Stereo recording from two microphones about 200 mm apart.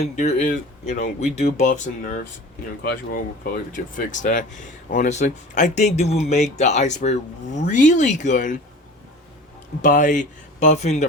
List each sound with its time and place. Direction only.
0.0 s speech: 35° left (ahead or behind)
9.8 s speech: 40° left (ahead or behind)